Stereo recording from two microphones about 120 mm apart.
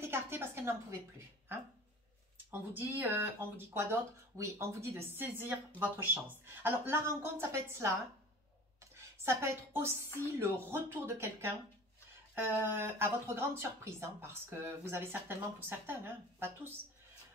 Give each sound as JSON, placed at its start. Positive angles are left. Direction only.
{"t": 0.0, "sound": "speech", "side_deg": -20}
{"t": 9.2, "sound": "speech", "side_deg": -20}